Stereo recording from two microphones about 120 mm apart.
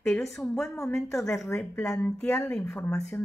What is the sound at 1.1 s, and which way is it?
Speech, centre (ahead or behind).